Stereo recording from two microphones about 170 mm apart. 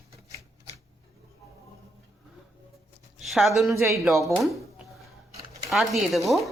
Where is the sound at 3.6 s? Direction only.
15° right (ahead or behind).